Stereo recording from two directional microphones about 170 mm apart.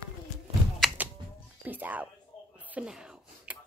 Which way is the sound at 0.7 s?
Centre (ahead or behind).